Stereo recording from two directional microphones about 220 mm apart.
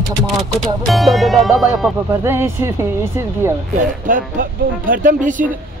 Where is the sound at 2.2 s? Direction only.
10° right (ahead or behind).